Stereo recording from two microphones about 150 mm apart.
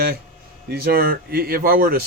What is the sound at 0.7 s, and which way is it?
Speech, 90° right.